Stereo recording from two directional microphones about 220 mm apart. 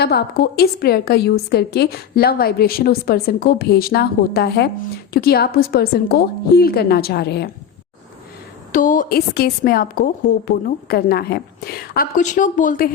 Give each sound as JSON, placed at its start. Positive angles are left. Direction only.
{"t": 0.0, "sound": "a woman's voice", "side_deg": 45}
{"t": 8.7, "sound": "a woman's voice", "side_deg": 40}